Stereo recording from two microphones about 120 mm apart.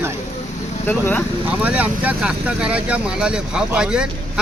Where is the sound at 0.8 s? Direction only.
15° left (ahead or behind).